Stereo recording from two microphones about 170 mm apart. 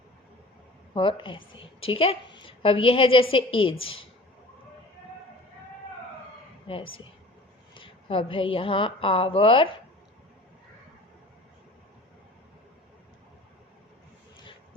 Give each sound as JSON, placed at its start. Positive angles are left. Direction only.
{"t": 0.9, "sound": "a woman's voice", "side_deg": 30}
{"t": 6.7, "sound": "a woman's voice", "side_deg": 30}